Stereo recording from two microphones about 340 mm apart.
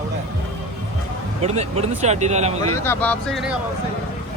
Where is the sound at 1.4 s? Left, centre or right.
Centre.